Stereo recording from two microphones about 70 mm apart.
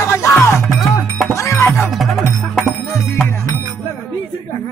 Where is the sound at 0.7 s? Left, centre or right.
Centre.